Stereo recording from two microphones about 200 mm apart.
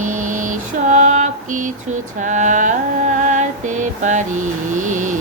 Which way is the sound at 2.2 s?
40° right (ahead or behind).